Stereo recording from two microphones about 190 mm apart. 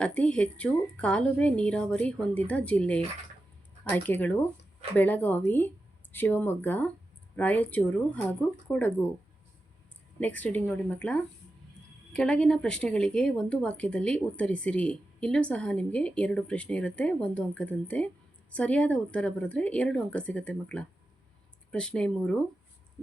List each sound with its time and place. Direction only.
0.0 s a woman's voice: 5° left (ahead or behind)
10.2 s a woman's voice: 10° left (ahead or behind)